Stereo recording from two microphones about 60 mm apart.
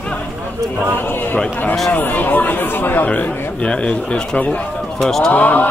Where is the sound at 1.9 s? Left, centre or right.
Left.